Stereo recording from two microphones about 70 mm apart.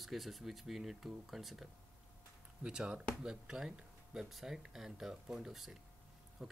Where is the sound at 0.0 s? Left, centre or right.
Centre.